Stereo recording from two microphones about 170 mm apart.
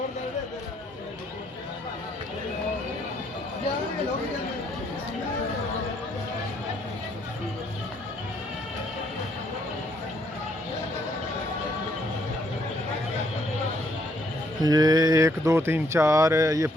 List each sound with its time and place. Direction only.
14.6 s speech: 20° right (ahead or behind)